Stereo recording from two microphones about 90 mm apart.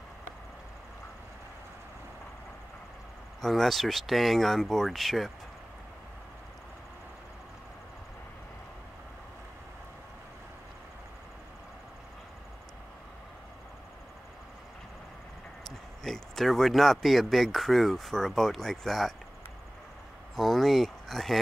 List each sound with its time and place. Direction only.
3.3 s speech: 5° left (ahead or behind)
16.0 s speech: 5° left (ahead or behind)
20.3 s speech: centre (ahead or behind)